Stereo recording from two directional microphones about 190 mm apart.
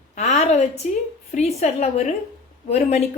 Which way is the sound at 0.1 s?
35° left (ahead or behind).